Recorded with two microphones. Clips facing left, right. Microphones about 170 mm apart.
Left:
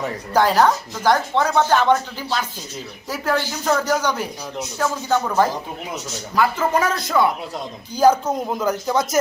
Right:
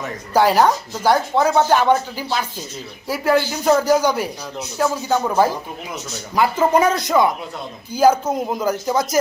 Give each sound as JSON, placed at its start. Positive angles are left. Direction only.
{"t": 0.3, "sound": "speech", "side_deg": -10}
{"t": 6.7, "sound": "speech", "side_deg": -20}
{"t": 7.9, "sound": "speech", "side_deg": -5}